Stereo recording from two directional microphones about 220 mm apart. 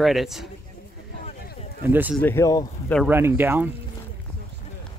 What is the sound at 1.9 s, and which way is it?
Speech, 10° right (ahead or behind).